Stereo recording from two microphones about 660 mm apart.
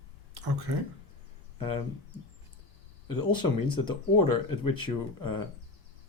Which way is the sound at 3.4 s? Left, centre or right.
Centre.